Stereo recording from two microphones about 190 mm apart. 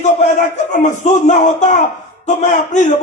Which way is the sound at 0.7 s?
40° left (ahead or behind).